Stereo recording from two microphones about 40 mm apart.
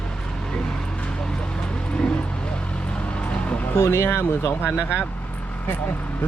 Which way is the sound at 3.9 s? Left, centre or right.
Left.